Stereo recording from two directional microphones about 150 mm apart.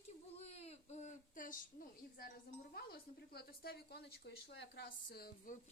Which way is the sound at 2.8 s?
90° left.